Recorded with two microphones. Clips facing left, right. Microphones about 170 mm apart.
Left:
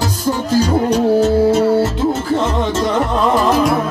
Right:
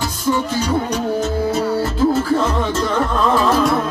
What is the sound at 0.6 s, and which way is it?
Music, 35° left (ahead or behind).